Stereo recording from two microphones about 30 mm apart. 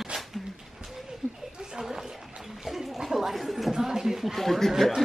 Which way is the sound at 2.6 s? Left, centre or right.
Centre.